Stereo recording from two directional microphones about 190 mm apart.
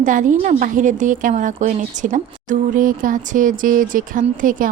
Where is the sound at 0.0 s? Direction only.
40° right (ahead or behind).